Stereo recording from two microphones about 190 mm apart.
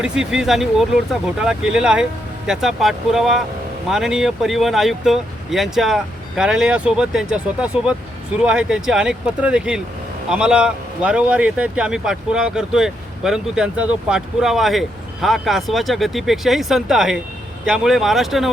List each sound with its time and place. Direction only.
0.0 s speech: 5° right (ahead or behind)